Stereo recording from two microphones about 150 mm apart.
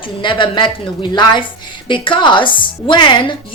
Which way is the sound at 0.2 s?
30° left (ahead or behind).